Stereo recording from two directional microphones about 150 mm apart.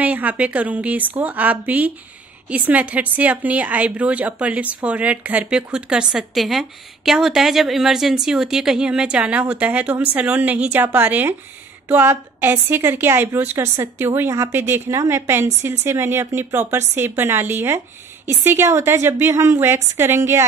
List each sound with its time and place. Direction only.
0.0 s a woman's voice: 10° right (ahead or behind)